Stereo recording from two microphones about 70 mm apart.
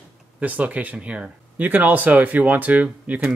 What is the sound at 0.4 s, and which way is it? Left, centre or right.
Speech, right.